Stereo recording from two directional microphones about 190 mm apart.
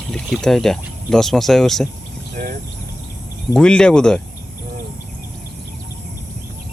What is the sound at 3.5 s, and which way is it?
Speech, 5° left (ahead or behind).